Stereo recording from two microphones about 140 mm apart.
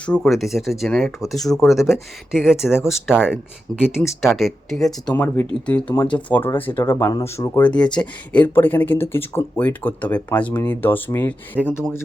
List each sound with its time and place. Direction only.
0.0 s speech: 5° left (ahead or behind)
3.7 s speech: 5° left (ahead or behind)
5.1 s speech: 15° left (ahead or behind)
7.7 s speech: 10° left (ahead or behind)